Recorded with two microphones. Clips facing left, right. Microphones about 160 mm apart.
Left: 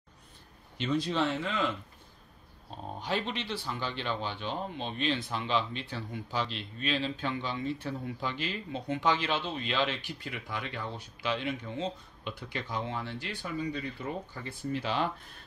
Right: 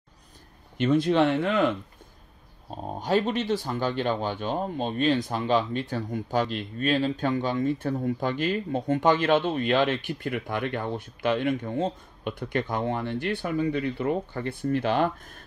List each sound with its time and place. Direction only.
0.7 s speech: 55° right (ahead or behind)
2.8 s speech: 40° right (ahead or behind)